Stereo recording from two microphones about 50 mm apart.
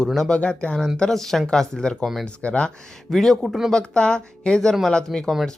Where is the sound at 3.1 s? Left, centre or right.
Centre.